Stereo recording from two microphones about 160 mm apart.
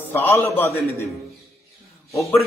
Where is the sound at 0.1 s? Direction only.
15° left (ahead or behind).